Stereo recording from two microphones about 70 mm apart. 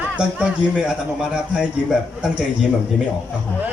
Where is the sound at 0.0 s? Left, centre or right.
Centre.